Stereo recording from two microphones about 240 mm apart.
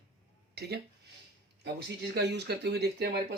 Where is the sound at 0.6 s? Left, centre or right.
Right.